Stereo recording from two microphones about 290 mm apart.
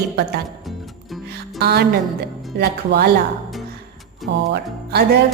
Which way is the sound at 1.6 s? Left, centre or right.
Right.